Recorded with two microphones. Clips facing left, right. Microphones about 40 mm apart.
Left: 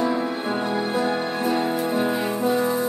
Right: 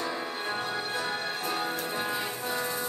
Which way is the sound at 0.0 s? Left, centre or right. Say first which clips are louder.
Left 9 dB; centre.